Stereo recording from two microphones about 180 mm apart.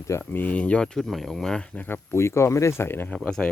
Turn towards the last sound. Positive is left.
turn(degrees=5)  # may be behind; listen again after turning